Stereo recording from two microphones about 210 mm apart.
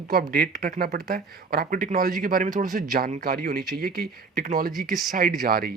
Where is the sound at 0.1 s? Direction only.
45° right (ahead or behind).